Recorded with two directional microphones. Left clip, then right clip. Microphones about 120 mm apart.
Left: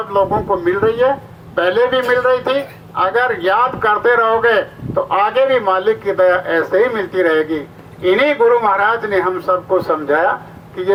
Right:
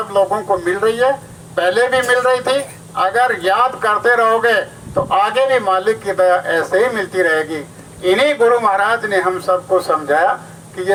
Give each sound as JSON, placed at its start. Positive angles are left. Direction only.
{"t": 0.1, "sound": "speech", "side_deg": 30}